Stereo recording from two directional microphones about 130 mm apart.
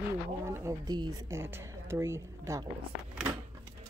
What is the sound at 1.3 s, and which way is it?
A woman's voice, 20° right (ahead or behind).